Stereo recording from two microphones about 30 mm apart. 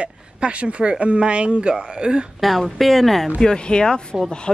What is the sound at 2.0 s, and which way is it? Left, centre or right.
Speech, right.